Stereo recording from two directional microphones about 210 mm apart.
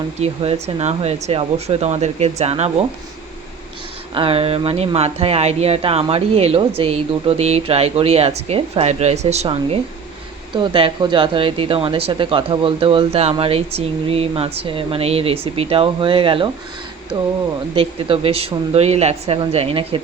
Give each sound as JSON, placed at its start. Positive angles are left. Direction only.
{"t": 0.2, "sound": "speech", "side_deg": -30}
{"t": 4.1, "sound": "speech", "side_deg": -25}